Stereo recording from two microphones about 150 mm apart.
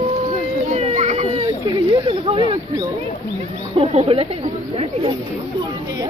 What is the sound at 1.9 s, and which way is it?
Speech, 35° right (ahead or behind).